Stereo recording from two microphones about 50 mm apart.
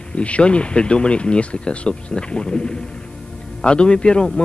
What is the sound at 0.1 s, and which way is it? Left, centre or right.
Speech, left.